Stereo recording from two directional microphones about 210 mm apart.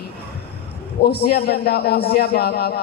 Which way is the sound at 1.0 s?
50° left (ahead or behind).